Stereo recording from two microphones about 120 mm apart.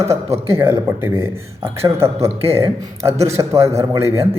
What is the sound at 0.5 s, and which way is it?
Speech, 20° right (ahead or behind).